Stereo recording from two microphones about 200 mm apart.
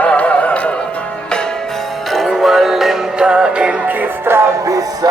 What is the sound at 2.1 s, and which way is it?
Music, centre (ahead or behind).